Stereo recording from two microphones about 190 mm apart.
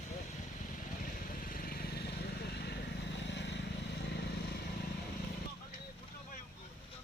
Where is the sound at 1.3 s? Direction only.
50° left (ahead or behind); by 3.6 s 65° left (ahead or behind).